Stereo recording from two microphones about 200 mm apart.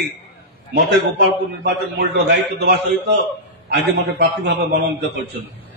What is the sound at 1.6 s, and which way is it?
A man's voice, 55° right (ahead or behind).